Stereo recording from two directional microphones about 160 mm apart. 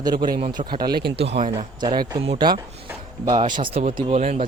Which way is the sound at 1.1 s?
40° right (ahead or behind).